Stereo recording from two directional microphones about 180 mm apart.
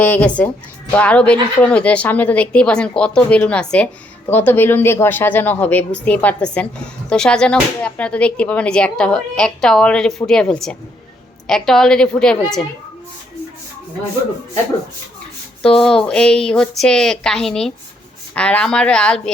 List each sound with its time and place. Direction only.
0.0 s a woman's voice: 10° left (ahead or behind)
15.6 s a woman's voice: 5° left (ahead or behind)